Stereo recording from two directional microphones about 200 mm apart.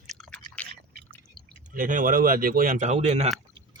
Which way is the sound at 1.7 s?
40° right (ahead or behind).